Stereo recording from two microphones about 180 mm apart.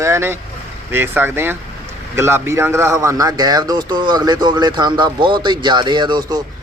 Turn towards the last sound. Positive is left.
turn(degrees=-25)  # may be behind; listen again after turning